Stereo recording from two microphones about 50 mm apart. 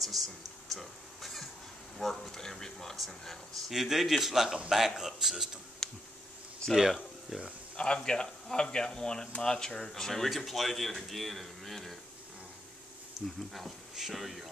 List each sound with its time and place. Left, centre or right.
0.0 s a sound: centre
2.0 s speech: centre
5.8 s tick: centre
6.7 s speech: centre
7.7 s speech: centre
13.2 s speech: centre